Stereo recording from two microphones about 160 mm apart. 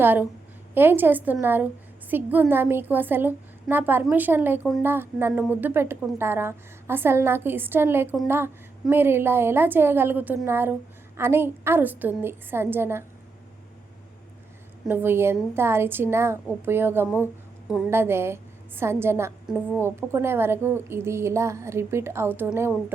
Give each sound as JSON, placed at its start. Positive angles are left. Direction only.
{"t": 0.0, "sound": "a woman's voice", "side_deg": -10}
{"t": 14.8, "sound": "a woman's voice", "side_deg": -15}